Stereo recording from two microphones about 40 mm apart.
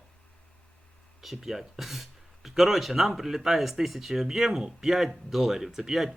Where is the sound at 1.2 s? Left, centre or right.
Centre.